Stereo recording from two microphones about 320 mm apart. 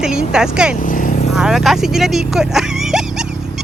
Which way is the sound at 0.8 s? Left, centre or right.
Left.